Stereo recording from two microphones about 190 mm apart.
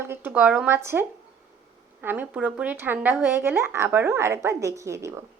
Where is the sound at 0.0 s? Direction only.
10° right (ahead or behind).